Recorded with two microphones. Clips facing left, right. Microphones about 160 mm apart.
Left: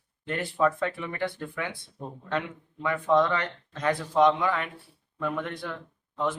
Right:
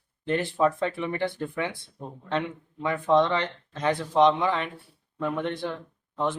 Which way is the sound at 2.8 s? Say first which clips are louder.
Right 1 dB; 25° right (ahead or behind).